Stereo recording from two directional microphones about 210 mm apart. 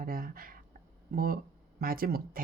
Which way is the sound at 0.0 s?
45° right (ahead or behind).